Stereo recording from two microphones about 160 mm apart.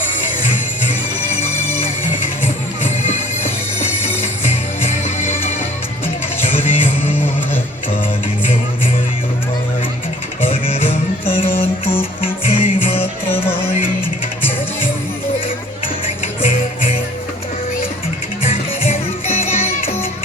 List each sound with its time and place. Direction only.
3.8 s music: 45° left (ahead or behind)
6.6 s music: 15° left (ahead or behind)
10.4 s music: 40° left (ahead or behind)
12.5 s music: 35° left (ahead or behind)
18.4 s music: 40° left (ahead or behind)